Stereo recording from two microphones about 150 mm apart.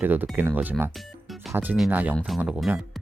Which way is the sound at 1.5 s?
10° right (ahead or behind).